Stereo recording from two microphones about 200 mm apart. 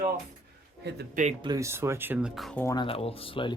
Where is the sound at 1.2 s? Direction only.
35° right (ahead or behind).